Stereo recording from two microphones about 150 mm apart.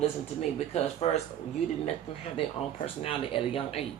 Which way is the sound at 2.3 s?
40° left (ahead or behind).